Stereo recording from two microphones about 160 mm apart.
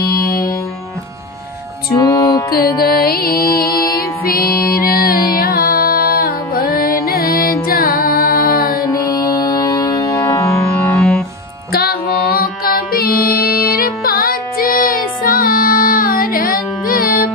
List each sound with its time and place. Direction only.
2.0 s music: 20° left (ahead or behind)
2.5 s music: 70° left (ahead or behind)
8.9 s music: 20° left (ahead or behind)
11.7 s music: 70° left (ahead or behind)